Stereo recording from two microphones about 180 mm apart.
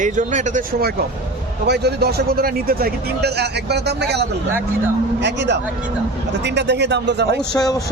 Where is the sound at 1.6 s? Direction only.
65° right (ahead or behind).